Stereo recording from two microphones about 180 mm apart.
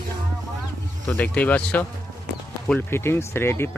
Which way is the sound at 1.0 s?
10° left (ahead or behind).